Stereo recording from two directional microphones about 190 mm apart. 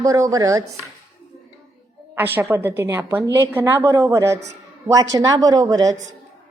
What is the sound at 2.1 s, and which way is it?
A woman's voice, 10° right (ahead or behind).